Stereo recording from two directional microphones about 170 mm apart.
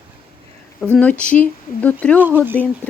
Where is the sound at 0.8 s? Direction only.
10° left (ahead or behind).